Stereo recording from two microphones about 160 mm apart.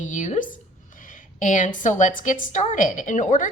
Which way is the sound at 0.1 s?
50° left (ahead or behind).